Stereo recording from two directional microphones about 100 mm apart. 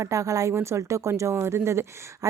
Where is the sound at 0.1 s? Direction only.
35° right (ahead or behind).